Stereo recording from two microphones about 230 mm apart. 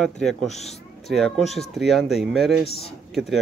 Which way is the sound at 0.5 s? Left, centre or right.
Left.